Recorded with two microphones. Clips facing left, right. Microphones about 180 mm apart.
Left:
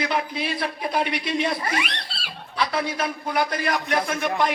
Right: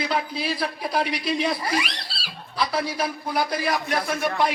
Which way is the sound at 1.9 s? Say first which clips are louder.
Left 2 dB; 5° right (ahead or behind).